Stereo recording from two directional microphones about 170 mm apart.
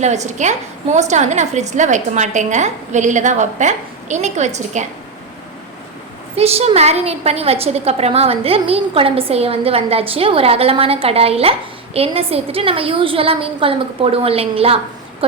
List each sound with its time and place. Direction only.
0.0 s a woman's voice: 40° right (ahead or behind)
6.3 s a woman's voice: 35° right (ahead or behind)